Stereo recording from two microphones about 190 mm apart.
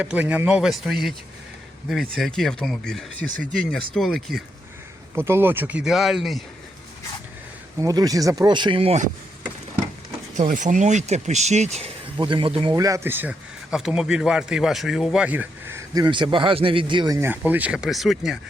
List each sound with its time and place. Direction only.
0.0 s speech: 5° right (ahead or behind)
5.1 s speech: 10° right (ahead or behind)
7.8 s speech: 20° right (ahead or behind)
10.3 s speech: 40° right (ahead or behind)
12.1 s speech: 25° right (ahead or behind)
12.7 s speech: 15° right (ahead or behind)
16.0 s speech: 25° right (ahead or behind); by 18.3 s centre (ahead or behind)